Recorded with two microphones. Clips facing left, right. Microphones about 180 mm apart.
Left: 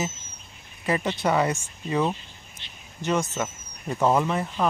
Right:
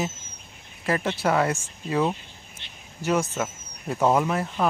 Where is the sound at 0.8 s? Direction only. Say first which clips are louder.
Even; centre (ahead or behind).